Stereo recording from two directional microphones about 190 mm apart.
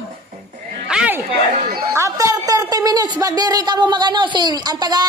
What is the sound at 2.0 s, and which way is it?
A man's voice, 15° right (ahead or behind).